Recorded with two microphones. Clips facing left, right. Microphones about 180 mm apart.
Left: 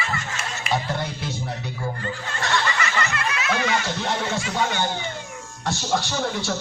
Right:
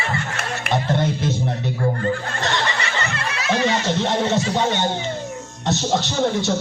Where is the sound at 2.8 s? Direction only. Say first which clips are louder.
Even; 30° right (ahead or behind).